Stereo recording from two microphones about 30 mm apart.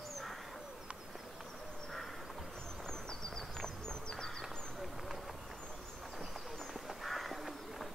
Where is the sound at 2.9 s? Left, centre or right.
Centre.